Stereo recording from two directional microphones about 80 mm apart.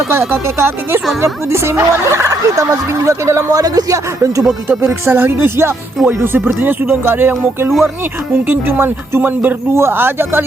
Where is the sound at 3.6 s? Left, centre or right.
Right.